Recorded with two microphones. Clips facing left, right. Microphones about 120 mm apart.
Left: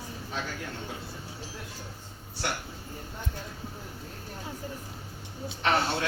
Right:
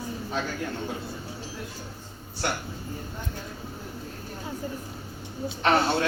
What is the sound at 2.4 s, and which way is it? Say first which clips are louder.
Speech: right 4 dB; 45° right (ahead or behind).